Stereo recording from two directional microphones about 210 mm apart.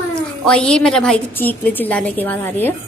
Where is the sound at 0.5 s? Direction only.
5° left (ahead or behind).